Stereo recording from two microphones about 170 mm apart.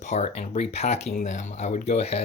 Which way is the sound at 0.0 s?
40° left (ahead or behind).